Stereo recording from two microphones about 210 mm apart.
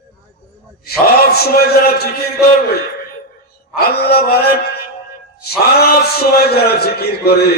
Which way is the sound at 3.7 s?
50° left (ahead or behind).